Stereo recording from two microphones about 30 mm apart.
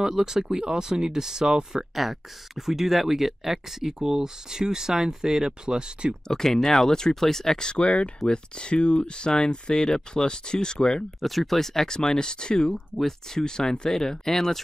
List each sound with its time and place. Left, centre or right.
0.0 s speech: centre
2.0 s speech: centre; by 5.9 s right
6.2 s speech: centre
7.5 s speech: left
11.1 s speech: centre; by 12.7 s left
12.9 s speech: centre